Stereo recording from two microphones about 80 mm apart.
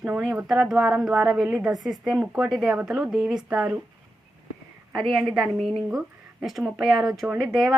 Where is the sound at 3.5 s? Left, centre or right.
Centre.